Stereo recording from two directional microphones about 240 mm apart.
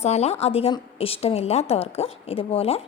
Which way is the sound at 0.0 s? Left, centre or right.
Left.